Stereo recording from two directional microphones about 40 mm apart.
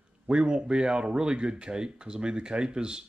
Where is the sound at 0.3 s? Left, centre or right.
Right.